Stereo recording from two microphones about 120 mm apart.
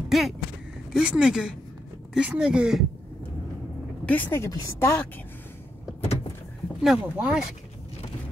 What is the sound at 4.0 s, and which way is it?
Speech, 15° left (ahead or behind).